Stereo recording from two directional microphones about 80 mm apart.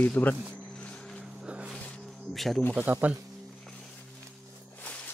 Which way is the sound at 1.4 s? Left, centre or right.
Centre.